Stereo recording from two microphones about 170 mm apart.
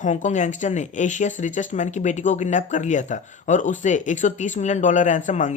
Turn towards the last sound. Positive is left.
turn(degrees=45)  # may be behind; listen again after turning